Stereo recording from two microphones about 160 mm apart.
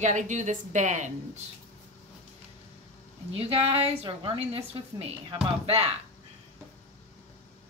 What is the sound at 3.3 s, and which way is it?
A woman's voice, 35° right (ahead or behind).